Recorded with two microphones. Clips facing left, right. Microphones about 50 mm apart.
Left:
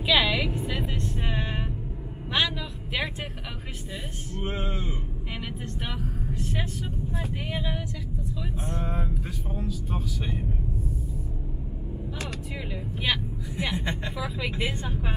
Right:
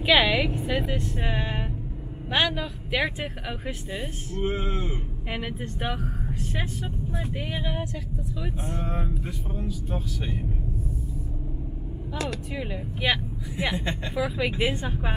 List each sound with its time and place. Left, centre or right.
0.0 s a woman's voice: centre
2.3 s speech: right
4.4 s speech: centre
5.3 s speech: centre
5.9 s speech: centre
6.5 s speech: centre
7.2 s speech: centre
8.4 s speech: centre
9.8 s speech: centre
12.5 s speech: centre